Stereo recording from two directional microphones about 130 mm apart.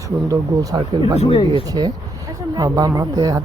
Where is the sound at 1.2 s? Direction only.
45° left (ahead or behind).